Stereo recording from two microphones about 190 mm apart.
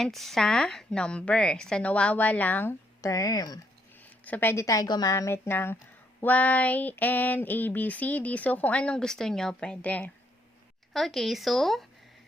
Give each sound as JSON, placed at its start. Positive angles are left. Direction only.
{"t": 0.0, "sound": "a woman's voice", "side_deg": 0}
{"t": 4.3, "sound": "a sound", "side_deg": 10}
{"t": 10.9, "sound": "a woman's voice", "side_deg": 0}